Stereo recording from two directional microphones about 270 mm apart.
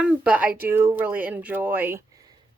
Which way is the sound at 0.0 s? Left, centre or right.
Centre.